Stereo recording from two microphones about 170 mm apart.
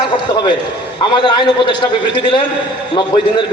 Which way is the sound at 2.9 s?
25° left (ahead or behind).